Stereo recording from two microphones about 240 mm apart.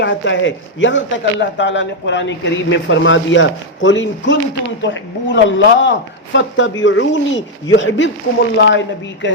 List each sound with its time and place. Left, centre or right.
0.0 s a man's voice: left